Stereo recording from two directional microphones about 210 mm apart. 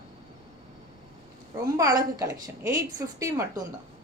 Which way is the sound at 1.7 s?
15° right (ahead or behind).